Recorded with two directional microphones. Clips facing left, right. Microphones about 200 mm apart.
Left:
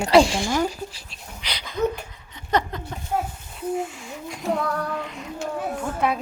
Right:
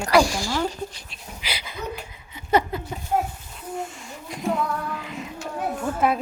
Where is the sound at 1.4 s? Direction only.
10° right (ahead or behind).